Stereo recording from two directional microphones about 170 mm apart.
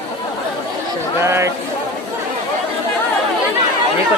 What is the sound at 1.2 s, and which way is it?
Speech, 15° right (ahead or behind).